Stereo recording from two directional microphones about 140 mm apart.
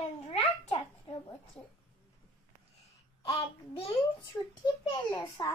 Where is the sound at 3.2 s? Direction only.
40° left (ahead or behind).